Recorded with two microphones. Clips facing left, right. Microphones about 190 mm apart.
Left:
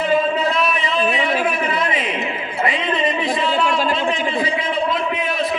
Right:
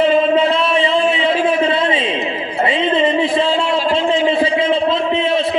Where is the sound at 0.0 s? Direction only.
25° right (ahead or behind).